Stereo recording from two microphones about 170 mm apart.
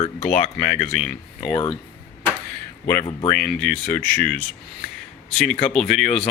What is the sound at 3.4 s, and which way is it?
Speech, 5° left (ahead or behind).